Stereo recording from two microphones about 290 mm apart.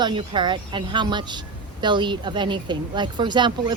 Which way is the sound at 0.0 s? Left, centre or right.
Centre.